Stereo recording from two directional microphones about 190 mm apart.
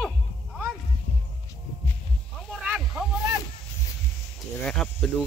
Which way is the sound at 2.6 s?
5° right (ahead or behind).